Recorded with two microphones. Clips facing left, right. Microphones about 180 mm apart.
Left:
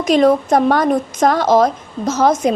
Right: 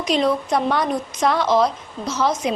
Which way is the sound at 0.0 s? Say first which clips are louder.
Left 7 dB; 50° left (ahead or behind).